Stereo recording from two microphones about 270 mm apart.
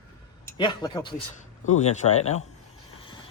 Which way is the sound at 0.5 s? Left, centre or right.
Centre.